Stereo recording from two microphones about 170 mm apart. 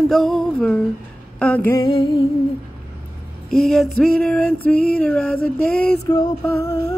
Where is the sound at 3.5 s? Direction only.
Centre (ahead or behind).